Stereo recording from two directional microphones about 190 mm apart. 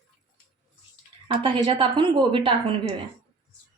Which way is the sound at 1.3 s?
25° right (ahead or behind).